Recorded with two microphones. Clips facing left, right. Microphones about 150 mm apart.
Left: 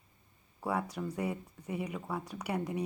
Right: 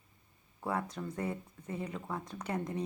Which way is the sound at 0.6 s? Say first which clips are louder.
Left 2 dB; 10° left (ahead or behind).